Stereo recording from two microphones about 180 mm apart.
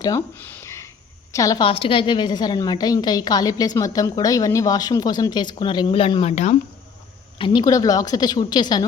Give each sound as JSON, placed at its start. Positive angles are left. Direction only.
{"t": 0.0, "sound": "a woman's voice", "side_deg": 15}